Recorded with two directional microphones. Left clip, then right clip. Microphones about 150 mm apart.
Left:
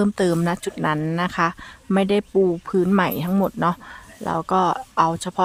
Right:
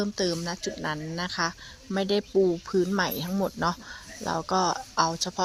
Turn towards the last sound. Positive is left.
turn(degrees=45)  # may be behind; listen again after turning